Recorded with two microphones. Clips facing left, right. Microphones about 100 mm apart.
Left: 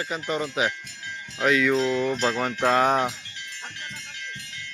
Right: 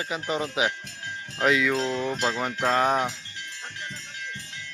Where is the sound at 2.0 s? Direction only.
10° right (ahead or behind).